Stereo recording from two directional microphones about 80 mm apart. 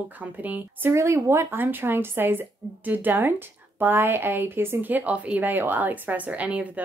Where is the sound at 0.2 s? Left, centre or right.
Right.